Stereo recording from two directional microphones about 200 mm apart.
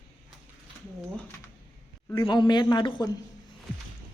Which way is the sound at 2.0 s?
20° left (ahead or behind).